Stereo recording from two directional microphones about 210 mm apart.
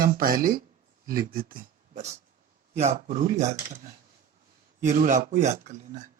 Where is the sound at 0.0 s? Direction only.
45° right (ahead or behind).